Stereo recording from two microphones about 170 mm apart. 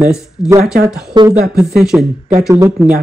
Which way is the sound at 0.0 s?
5° right (ahead or behind).